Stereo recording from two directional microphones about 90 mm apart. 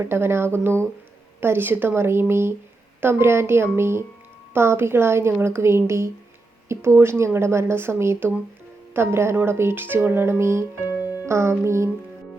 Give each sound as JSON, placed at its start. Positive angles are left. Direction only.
{"t": 0.0, "sound": "speech", "side_deg": -25}
{"t": 11.3, "sound": "music", "side_deg": -30}